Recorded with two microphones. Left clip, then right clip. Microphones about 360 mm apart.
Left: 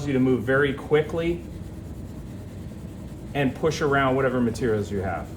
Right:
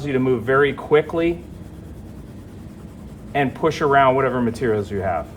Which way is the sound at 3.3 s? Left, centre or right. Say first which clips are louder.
Right 5 dB; centre.